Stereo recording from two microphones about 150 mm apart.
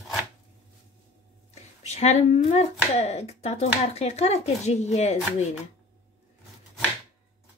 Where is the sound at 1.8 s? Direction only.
45° left (ahead or behind).